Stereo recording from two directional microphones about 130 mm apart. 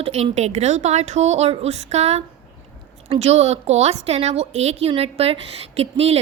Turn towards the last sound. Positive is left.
turn(degrees=-50)  # may be behind; listen again after turning